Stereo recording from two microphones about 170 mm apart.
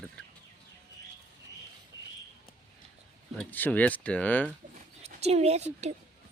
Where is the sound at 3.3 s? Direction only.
10° left (ahead or behind).